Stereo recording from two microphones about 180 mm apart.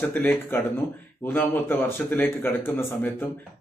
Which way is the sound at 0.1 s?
10° left (ahead or behind).